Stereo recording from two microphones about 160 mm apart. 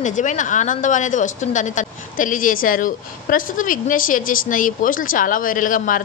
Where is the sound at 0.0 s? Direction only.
50° left (ahead or behind).